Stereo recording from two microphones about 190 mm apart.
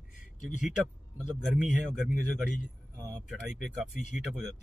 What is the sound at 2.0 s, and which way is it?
Speech, centre (ahead or behind).